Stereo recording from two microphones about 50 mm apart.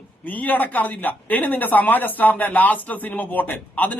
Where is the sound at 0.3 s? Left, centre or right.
Left.